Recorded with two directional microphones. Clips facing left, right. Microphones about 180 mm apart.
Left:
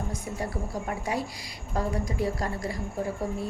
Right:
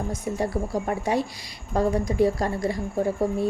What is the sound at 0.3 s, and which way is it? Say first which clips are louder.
A woman's voice: right 9 dB; 25° right (ahead or behind).